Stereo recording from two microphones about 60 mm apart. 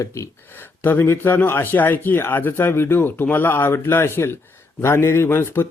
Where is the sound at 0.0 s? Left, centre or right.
Left.